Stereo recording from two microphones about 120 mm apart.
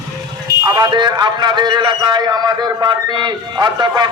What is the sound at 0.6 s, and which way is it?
A man's voice, 35° right (ahead or behind).